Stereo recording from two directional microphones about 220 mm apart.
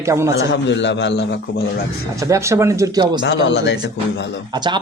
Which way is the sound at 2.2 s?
15° right (ahead or behind).